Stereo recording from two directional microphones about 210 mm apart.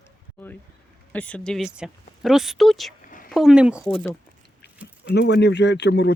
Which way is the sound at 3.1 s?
40° left (ahead or behind).